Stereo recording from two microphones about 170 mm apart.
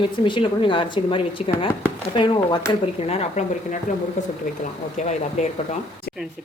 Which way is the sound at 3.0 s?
35° left (ahead or behind).